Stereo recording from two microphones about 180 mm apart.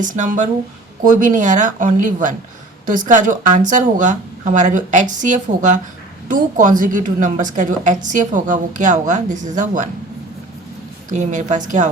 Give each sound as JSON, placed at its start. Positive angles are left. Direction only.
{"t": 0.0, "sound": "a woman's voice", "side_deg": -45}
{"t": 11.1, "sound": "a woman's voice", "side_deg": -40}